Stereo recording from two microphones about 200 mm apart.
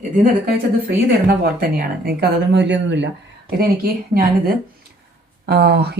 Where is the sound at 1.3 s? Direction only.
50° right (ahead or behind).